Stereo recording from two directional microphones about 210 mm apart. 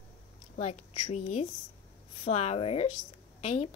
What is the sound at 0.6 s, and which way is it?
A woman's voice, 30° left (ahead or behind).